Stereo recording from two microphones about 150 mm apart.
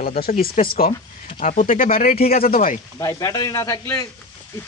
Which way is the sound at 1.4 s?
60° left (ahead or behind).